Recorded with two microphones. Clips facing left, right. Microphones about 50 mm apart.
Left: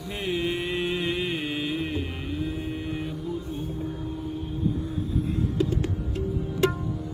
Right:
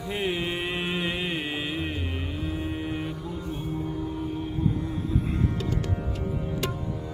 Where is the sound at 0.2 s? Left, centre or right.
Centre.